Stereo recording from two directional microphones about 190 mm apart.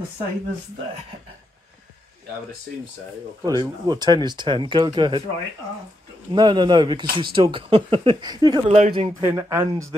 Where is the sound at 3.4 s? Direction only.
20° right (ahead or behind).